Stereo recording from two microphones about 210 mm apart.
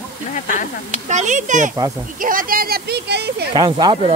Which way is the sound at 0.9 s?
35° right (ahead or behind).